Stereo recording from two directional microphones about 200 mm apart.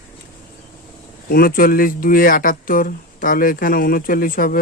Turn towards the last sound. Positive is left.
turn(degrees=45)  # may be behind; listen again after turning